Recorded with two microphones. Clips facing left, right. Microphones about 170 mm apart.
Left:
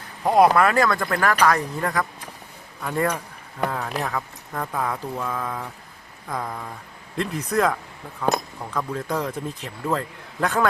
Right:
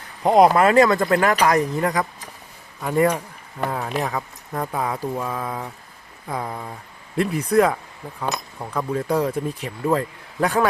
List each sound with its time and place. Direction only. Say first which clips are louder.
0.2 s speech: right 2 dB; 20° right (ahead or behind)